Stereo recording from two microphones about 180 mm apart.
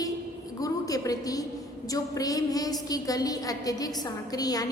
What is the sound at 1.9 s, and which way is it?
A woman's voice, 20° left (ahead or behind).